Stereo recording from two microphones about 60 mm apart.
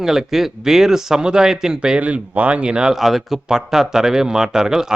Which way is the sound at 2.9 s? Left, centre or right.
Centre.